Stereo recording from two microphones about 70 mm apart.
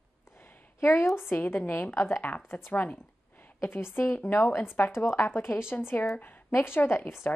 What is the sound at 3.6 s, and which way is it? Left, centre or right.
Speech, left.